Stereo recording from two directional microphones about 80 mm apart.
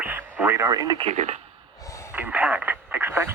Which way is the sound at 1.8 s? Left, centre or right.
Left.